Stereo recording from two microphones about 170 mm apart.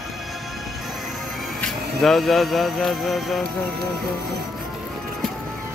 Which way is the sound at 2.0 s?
Centre (ahead or behind).